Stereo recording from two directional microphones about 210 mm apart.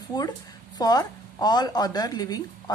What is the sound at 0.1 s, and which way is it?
A woman's voice, 20° left (ahead or behind).